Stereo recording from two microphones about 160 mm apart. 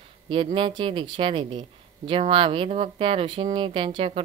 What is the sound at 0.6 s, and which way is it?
Speech, 30° right (ahead or behind).